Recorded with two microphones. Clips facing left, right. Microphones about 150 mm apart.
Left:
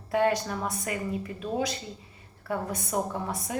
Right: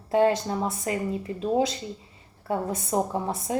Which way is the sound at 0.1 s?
25° right (ahead or behind).